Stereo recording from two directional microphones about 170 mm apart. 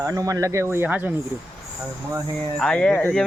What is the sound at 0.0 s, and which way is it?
Speech, 20° right (ahead or behind).